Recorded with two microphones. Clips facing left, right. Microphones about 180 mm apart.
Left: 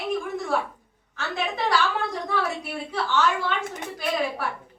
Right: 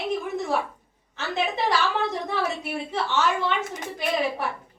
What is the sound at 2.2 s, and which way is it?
A woman's voice, 20° right (ahead or behind).